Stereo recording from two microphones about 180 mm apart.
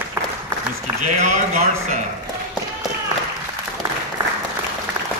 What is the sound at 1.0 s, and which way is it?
Speech, 40° right (ahead or behind).